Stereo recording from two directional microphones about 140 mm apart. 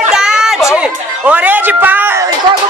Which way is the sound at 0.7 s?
10° right (ahead or behind).